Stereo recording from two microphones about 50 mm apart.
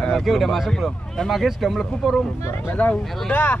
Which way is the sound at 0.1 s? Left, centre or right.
Centre.